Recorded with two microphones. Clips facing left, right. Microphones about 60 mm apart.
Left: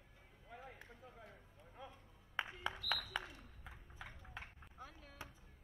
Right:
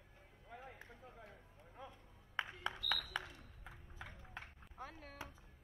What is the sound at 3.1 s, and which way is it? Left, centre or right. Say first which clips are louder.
Ping: even; left.